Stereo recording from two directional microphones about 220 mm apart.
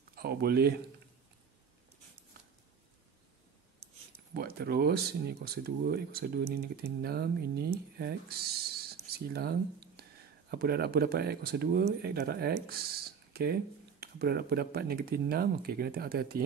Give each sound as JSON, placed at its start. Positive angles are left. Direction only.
{"t": 0.1, "sound": "speech", "side_deg": -45}
{"t": 4.3, "sound": "speech", "side_deg": -45}